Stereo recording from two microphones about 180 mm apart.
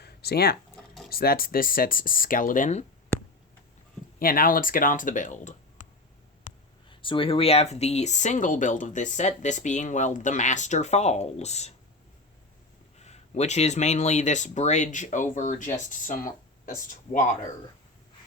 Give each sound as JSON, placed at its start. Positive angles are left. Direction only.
{"t": 0.0, "sound": "a sound", "side_deg": 60}
{"t": 1.1, "sound": "speech", "side_deg": 55}
{"t": 4.2, "sound": "speech", "side_deg": 55}
{"t": 6.9, "sound": "speech", "side_deg": 30}
{"t": 13.0, "sound": "speech", "side_deg": 35}